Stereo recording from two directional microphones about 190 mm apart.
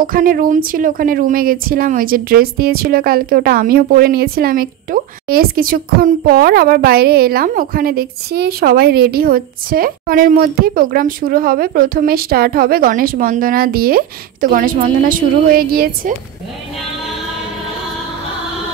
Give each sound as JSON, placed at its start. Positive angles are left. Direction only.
{"t": 0.0, "sound": "a woman's voice", "side_deg": -45}